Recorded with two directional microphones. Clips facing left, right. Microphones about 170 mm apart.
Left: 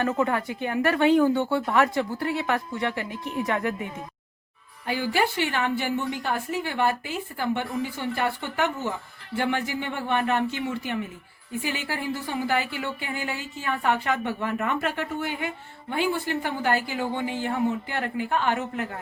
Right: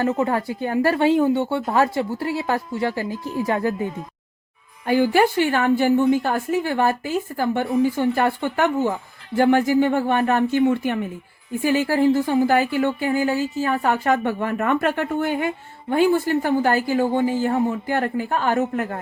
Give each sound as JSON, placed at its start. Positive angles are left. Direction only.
{"t": 0.0, "sound": "speech", "side_deg": -30}
{"t": 4.9, "sound": "speech", "side_deg": -50}